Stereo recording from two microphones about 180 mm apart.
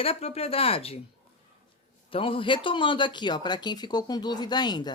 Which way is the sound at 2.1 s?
30° left (ahead or behind).